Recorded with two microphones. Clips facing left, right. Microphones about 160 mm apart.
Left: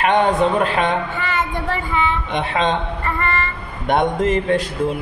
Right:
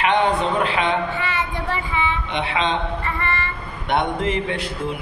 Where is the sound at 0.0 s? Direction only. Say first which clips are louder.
Left 3 dB; 45° left (ahead or behind).